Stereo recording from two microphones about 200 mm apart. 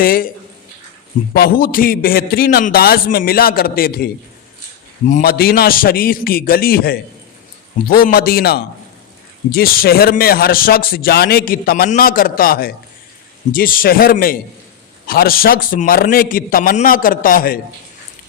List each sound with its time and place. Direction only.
0.0 s a man's voice: 45° left (ahead or behind)
1.3 s a man's voice: 50° left (ahead or behind)